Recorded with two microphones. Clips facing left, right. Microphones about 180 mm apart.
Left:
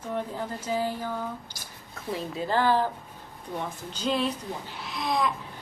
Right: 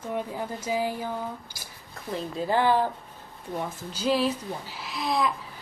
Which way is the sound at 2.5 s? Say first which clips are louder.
Right 1 dB; 15° right (ahead or behind).